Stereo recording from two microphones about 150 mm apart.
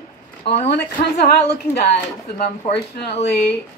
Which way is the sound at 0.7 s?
90° left.